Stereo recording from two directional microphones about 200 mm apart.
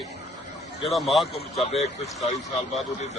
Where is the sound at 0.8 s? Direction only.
Centre (ahead or behind).